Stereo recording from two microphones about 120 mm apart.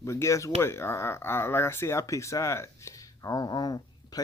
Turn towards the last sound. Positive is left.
turn(degrees=35)  # may be behind; listen again after turning